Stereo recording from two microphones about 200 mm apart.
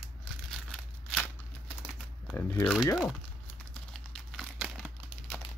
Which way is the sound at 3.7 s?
5° left (ahead or behind).